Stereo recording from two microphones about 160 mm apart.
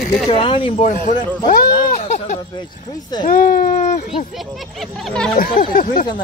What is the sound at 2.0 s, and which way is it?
Speech, 45° left (ahead or behind).